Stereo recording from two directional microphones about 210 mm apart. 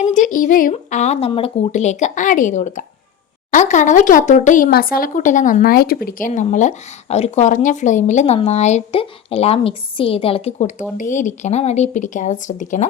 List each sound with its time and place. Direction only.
0.0 s speech: 35° left (ahead or behind)